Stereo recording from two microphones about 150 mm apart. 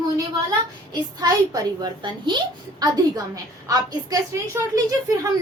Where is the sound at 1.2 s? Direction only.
25° right (ahead or behind).